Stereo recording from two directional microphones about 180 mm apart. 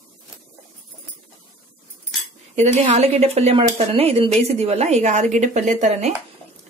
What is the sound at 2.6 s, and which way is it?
Speech, 40° right (ahead or behind).